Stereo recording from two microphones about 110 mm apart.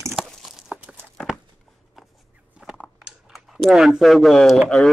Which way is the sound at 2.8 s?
5° right (ahead or behind).